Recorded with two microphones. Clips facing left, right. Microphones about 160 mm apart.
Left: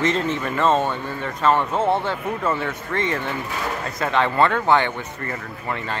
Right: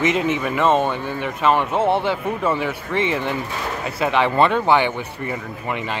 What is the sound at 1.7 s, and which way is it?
Speech, 30° right (ahead or behind).